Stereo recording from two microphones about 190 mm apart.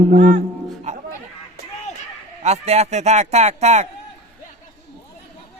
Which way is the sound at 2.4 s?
35° right (ahead or behind).